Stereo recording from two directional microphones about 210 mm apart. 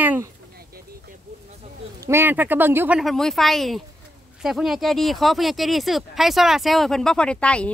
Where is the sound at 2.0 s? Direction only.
10° right (ahead or behind).